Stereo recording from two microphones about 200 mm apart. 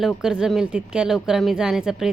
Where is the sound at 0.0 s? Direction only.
Centre (ahead or behind).